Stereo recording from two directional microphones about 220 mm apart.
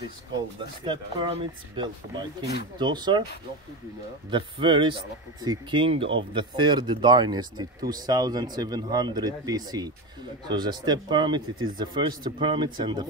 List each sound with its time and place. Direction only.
0.8 s speech: 20° right (ahead or behind)
4.3 s speech: 20° right (ahead or behind)